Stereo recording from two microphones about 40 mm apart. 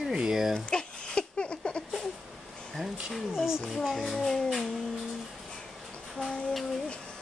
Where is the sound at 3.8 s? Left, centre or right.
Centre.